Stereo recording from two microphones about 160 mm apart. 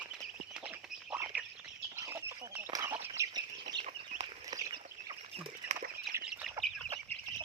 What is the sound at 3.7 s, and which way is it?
Chicken, 30° right (ahead or behind).